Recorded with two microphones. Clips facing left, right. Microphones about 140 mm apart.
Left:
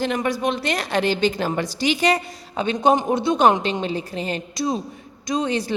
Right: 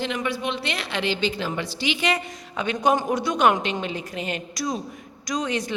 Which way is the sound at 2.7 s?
20° left (ahead or behind).